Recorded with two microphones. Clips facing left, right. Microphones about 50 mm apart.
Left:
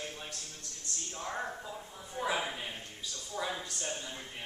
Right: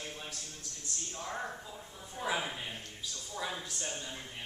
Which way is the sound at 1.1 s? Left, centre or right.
Centre.